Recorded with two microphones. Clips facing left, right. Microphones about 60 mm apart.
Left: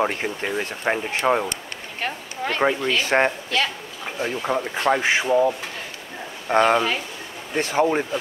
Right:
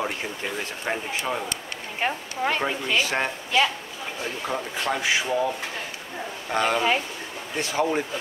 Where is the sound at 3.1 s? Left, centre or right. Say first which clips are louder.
Left 7 dB; left.